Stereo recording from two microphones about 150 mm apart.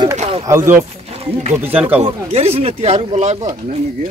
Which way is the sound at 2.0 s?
45° right (ahead or behind).